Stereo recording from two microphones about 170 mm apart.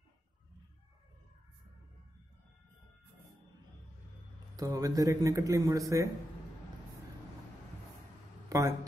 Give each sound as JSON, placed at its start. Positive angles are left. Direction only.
{"t": 4.6, "sound": "speech", "side_deg": -20}
{"t": 8.5, "sound": "speech", "side_deg": -20}